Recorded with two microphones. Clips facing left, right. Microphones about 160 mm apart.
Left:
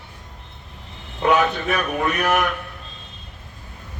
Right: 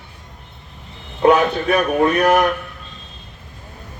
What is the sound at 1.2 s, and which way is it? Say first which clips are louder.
A man's voice: right 5 dB; 40° right (ahead or behind).